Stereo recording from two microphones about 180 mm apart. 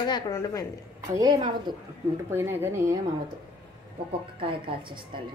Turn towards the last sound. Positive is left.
turn(degrees=-30)  # may be behind; listen again after turning